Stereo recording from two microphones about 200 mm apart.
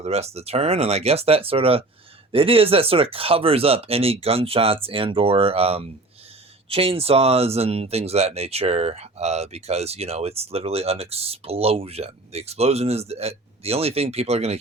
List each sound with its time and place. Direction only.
0.0 s speech: 30° right (ahead or behind)